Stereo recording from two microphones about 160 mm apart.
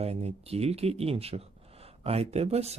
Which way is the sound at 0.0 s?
40° right (ahead or behind).